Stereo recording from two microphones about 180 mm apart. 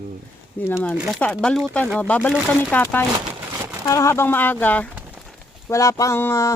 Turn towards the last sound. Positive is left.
turn(degrees=15)  # may be behind; listen again after turning